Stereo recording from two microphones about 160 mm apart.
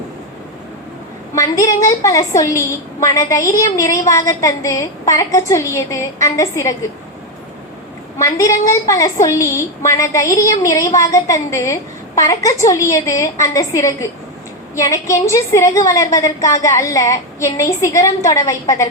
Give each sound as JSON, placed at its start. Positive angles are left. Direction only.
{"t": 1.4, "sound": "a woman's voice", "side_deg": 20}
{"t": 8.2, "sound": "a woman's voice", "side_deg": 20}